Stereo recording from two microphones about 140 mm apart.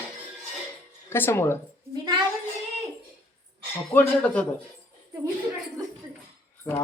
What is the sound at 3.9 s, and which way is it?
Speech, 10° left (ahead or behind).